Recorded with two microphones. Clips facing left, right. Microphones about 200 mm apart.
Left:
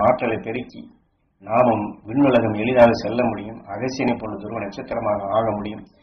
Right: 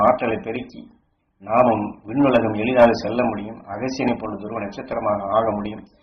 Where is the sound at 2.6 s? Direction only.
10° left (ahead or behind).